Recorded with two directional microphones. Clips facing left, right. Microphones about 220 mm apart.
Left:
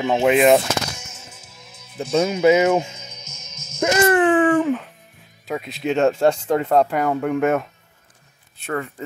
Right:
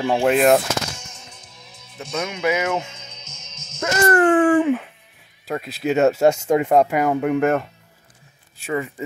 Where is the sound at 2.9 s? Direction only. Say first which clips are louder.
Left 2 dB; 10° left (ahead or behind).